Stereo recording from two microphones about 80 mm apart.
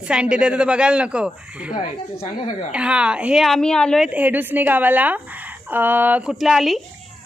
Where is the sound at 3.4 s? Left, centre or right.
Centre.